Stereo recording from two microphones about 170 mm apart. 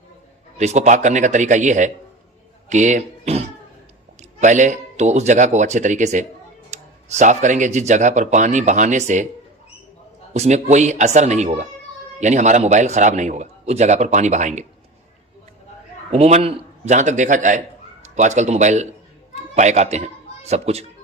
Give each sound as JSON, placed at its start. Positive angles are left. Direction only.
{"t": 0.6, "sound": "speech", "side_deg": -45}
{"t": 10.3, "sound": "speech", "side_deg": -40}
{"t": 16.1, "sound": "speech", "side_deg": -35}